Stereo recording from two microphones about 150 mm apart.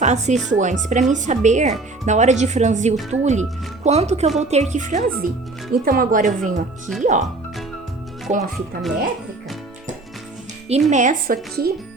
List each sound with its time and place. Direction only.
0.0 s speech: 50° right (ahead or behind)
8.3 s speech: 50° right (ahead or behind)
10.7 s speech: 50° right (ahead or behind); by 11.7 s 85° right